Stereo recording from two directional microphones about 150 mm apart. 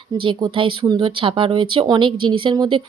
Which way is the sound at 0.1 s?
30° right (ahead or behind).